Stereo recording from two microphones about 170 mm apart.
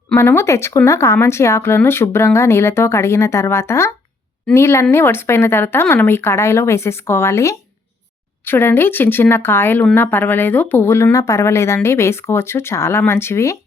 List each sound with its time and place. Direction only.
0.1 s speech: 15° left (ahead or behind)